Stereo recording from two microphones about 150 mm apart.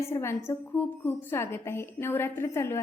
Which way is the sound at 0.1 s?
15° left (ahead or behind).